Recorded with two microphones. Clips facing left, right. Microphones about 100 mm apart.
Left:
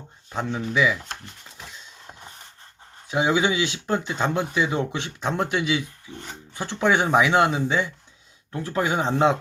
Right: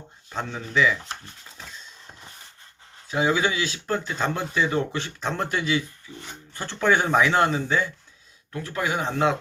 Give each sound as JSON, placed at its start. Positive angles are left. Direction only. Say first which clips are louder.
{"t": 0.5, "sound": "speech", "louder": "even", "side_deg": 10}
{"t": 3.1, "sound": "speech", "louder": "left 1 dB", "side_deg": 20}
{"t": 8.5, "sound": "speech", "louder": "left 3 dB", "side_deg": 30}